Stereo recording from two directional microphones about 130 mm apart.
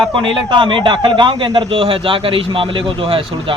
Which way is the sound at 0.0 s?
40° right (ahead or behind).